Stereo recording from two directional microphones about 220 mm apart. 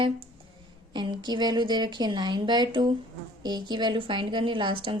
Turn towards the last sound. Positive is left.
turn(degrees=-20)  # may be behind; listen again after turning